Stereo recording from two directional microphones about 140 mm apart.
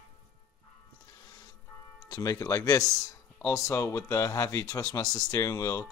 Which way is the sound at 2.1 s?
25° left (ahead or behind).